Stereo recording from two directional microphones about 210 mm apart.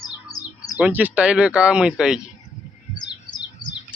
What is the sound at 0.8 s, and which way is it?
Speech, 10° right (ahead or behind).